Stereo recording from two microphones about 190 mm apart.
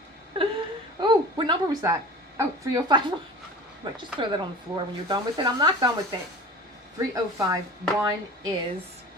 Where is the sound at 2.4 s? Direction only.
15° right (ahead or behind).